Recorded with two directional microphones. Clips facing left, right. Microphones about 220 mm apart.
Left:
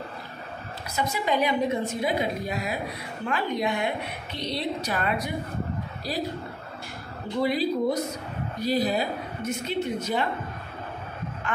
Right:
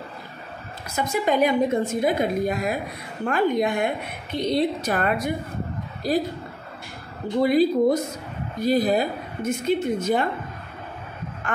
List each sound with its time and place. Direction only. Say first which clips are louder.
0.9 s a woman's voice: right 4 dB; 50° right (ahead or behind)
7.4 s a woman's voice: right 6 dB; 50° right (ahead or behind)